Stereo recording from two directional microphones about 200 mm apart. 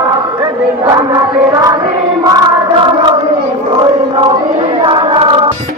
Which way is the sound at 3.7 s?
25° right (ahead or behind).